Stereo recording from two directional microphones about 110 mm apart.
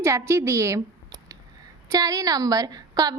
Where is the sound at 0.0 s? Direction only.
25° right (ahead or behind).